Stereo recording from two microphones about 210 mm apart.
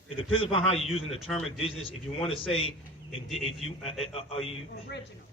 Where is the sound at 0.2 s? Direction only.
25° left (ahead or behind).